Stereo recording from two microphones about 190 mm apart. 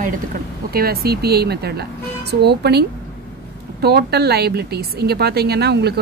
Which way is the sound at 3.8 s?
55° right (ahead or behind).